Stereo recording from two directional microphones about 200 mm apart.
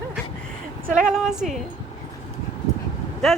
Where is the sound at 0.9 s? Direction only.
5° right (ahead or behind).